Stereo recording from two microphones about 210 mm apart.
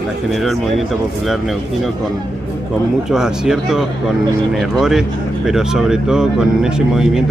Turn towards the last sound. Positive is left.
turn(degrees=-5)  # may be behind; listen again after turning